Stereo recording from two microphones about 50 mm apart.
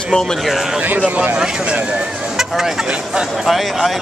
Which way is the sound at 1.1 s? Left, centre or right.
Right.